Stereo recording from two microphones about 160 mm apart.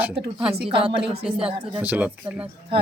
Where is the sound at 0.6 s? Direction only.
35° right (ahead or behind).